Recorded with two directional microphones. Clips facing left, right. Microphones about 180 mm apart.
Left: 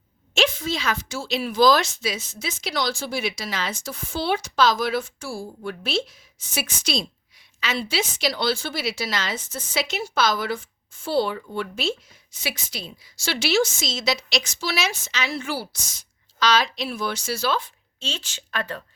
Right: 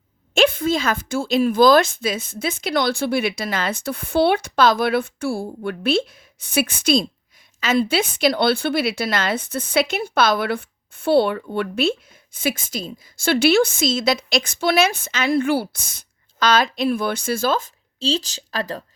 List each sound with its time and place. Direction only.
0.3 s speech: 55° right (ahead or behind); by 18.8 s 35° right (ahead or behind)